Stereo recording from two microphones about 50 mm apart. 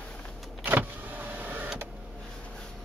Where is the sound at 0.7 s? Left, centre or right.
Right.